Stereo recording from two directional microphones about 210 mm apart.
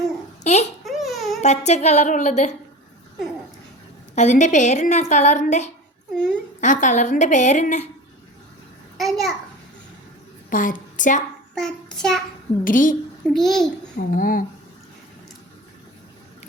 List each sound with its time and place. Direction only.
0.4 s a child's voice: 30° left (ahead or behind)
0.9 s a sound: centre (ahead or behind)
1.4 s a woman's voice: 35° left (ahead or behind)
4.1 s a woman's voice: 35° left (ahead or behind)
9.0 s a child's voice: centre (ahead or behind)
10.5 s a woman's voice: 40° left (ahead or behind)
11.5 s child singing: centre (ahead or behind)
12.6 s a woman's voice: 40° left (ahead or behind)
13.3 s a child's voice: centre (ahead or behind)
13.9 s a woman's voice: 40° left (ahead or behind)